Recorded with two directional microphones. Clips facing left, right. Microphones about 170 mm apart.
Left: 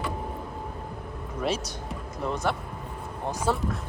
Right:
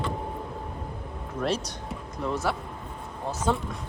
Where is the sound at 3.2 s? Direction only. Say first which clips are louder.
Even; 10° left (ahead or behind).